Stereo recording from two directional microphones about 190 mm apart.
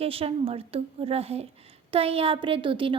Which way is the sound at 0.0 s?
30° right (ahead or behind).